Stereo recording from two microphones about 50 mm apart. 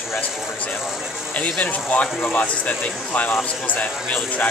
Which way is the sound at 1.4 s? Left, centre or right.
Left.